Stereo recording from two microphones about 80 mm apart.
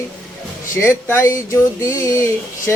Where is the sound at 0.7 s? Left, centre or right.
Left.